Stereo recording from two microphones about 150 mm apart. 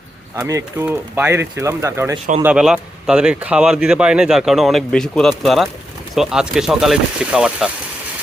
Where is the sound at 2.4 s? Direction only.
5° right (ahead or behind).